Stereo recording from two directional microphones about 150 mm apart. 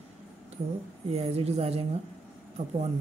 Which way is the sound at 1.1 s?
45° right (ahead or behind).